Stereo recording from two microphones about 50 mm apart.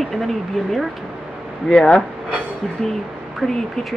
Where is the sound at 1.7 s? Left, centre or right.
Centre.